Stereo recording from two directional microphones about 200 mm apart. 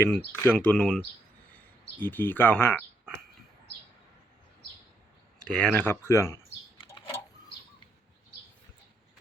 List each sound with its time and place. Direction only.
0.3 s speech: 5° left (ahead or behind)
5.5 s speech: 5° left (ahead or behind)
6.7 s a sound: 20° left (ahead or behind)